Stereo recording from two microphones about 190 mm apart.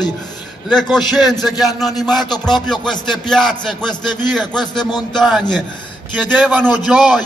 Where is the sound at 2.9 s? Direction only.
25° left (ahead or behind).